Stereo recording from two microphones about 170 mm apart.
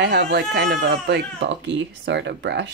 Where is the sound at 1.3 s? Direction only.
90° right.